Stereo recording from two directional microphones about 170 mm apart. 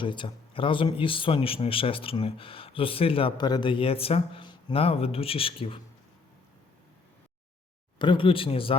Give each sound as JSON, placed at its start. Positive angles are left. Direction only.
{"t": 0.0, "sound": "a man's voice", "side_deg": 30}
{"t": 7.9, "sound": "a man's voice", "side_deg": 30}